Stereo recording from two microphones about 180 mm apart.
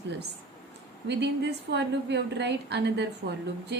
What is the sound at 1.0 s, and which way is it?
A woman's voice, 70° right (ahead or behind).